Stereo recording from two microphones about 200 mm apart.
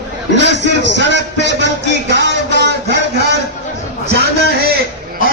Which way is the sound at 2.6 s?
60° right (ahead or behind).